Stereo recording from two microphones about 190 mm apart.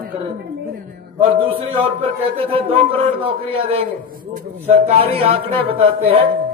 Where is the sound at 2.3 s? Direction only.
30° right (ahead or behind).